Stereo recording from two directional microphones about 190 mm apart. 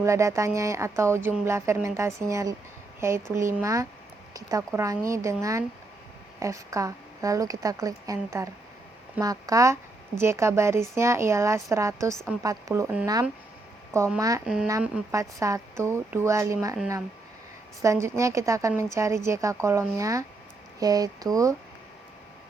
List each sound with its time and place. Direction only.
0.0 s a woman's voice: 15° right (ahead or behind)
14.2 s a woman's voice: 20° right (ahead or behind)
14.4 s a woman's voice: 5° right (ahead or behind)
17.8 s a woman's voice: 15° right (ahead or behind)